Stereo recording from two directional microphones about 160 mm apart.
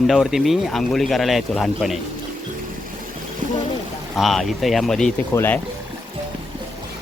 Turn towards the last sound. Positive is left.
turn(degrees=15)  # may be behind; listen again after turning